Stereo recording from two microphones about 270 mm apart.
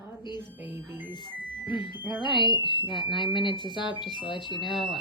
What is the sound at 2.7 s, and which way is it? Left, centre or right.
Speech, centre.